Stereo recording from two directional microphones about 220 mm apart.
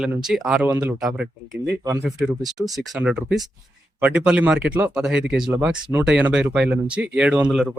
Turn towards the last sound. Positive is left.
turn(degrees=-5)  # may be behind; listen again after turning